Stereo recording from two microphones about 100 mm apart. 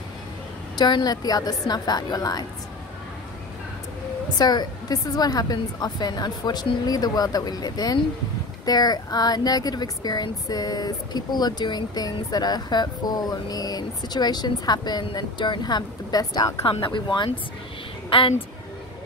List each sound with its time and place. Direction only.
0.7 s a woman's voice: 45° left (ahead or behind)
4.4 s a woman's voice: 45° left (ahead or behind)
16.6 s speech: 60° left (ahead or behind)
18.1 s speech: 65° left (ahead or behind)